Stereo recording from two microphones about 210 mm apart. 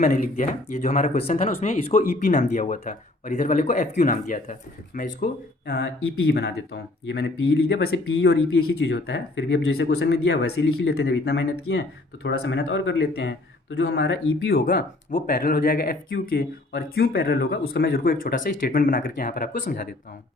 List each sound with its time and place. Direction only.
0.0 s speech: 40° left (ahead or behind)